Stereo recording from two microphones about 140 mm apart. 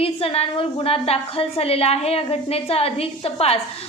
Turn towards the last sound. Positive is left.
turn(degrees=45)  # may be behind; listen again after turning